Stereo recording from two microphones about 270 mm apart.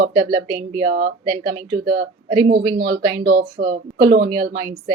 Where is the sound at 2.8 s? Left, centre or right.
Right.